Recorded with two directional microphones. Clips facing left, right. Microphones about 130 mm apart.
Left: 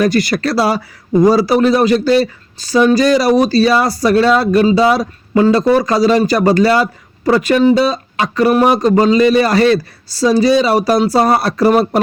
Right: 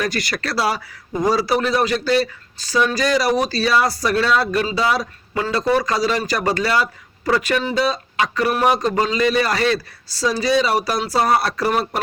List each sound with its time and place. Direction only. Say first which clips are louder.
0.0 s speech: left 10 dB; 35° left (ahead or behind)